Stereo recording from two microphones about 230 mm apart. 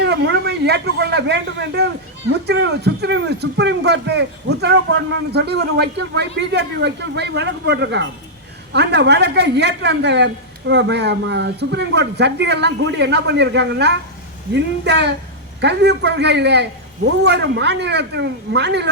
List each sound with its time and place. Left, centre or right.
0.0 s speech: right